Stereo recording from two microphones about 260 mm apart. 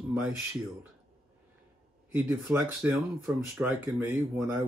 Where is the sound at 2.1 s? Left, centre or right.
Centre.